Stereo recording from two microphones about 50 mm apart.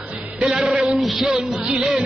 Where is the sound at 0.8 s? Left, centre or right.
Centre.